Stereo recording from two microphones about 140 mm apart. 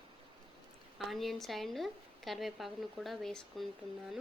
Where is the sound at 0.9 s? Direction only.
Centre (ahead or behind).